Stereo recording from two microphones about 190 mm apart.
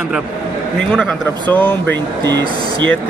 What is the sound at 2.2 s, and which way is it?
Speech, 70° right (ahead or behind).